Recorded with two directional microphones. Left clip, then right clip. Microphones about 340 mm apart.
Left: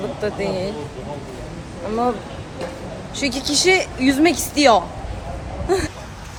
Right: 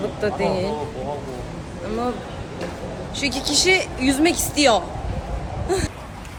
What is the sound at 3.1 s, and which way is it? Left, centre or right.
Speech, centre.